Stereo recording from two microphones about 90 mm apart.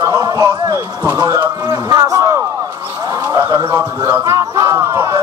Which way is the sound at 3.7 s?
35° right (ahead or behind).